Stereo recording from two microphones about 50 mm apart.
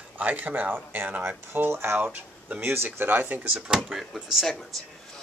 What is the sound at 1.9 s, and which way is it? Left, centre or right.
Speech, right.